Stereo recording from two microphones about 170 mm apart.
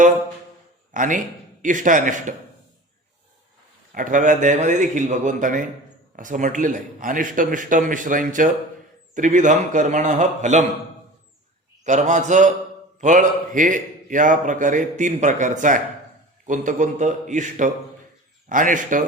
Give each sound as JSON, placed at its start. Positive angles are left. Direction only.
{"t": 0.9, "sound": "a man's voice", "side_deg": -50}
{"t": 3.9, "sound": "a man's voice", "side_deg": -50}
{"t": 11.9, "sound": "a man's voice", "side_deg": -45}